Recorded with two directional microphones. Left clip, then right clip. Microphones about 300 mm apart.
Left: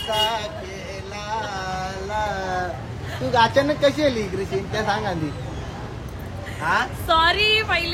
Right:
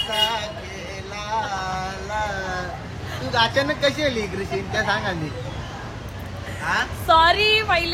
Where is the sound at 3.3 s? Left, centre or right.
Left.